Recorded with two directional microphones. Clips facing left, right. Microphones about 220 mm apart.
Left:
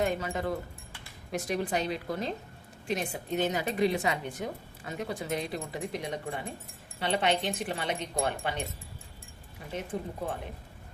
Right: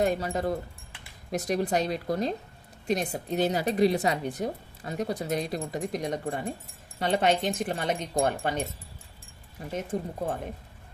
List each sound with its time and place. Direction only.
0.0 s speech: 35° right (ahead or behind)
9.9 s speech: 45° right (ahead or behind)